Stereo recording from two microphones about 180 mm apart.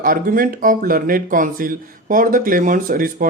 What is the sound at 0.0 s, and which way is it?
Speech, 50° right (ahead or behind).